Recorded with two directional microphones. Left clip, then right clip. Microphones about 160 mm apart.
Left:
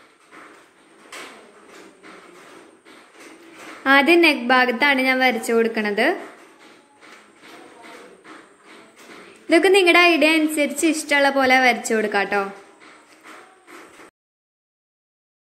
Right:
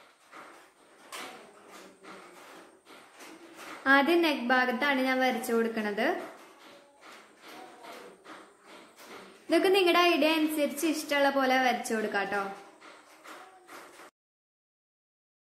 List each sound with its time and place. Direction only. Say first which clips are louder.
3.8 s a woman's voice: left 9 dB; 20° left (ahead or behind)
9.5 s a woman's voice: left 10 dB; 20° left (ahead or behind)